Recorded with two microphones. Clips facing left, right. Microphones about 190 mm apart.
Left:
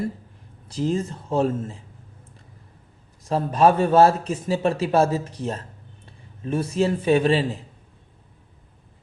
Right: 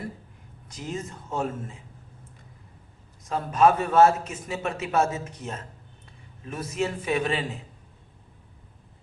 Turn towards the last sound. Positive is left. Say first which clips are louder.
# left 8 dB
turn(degrees=30)  # may be behind; listen again after turning